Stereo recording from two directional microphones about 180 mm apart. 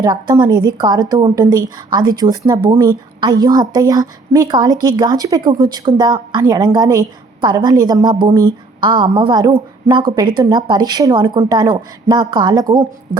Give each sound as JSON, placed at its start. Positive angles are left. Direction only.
{"t": 0.0, "sound": "a woman's voice", "side_deg": -25}